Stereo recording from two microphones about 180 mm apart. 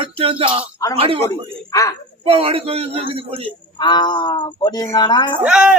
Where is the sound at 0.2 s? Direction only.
30° right (ahead or behind).